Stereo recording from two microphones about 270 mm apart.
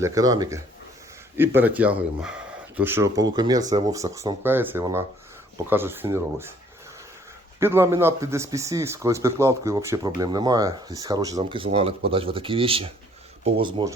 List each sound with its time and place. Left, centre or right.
0.0 s speech: centre
7.6 s speech: centre